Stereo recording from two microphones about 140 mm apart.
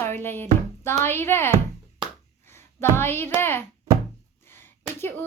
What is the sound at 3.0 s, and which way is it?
Speech, 15° left (ahead or behind).